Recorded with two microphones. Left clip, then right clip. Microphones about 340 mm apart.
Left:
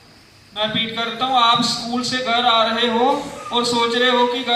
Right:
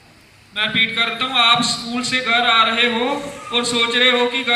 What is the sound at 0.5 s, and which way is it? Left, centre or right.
A man's voice, centre.